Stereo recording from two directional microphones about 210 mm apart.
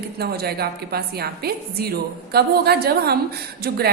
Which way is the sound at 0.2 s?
50° right (ahead or behind).